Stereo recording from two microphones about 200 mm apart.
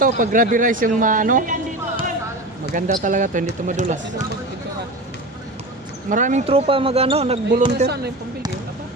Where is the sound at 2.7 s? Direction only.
40° right (ahead or behind).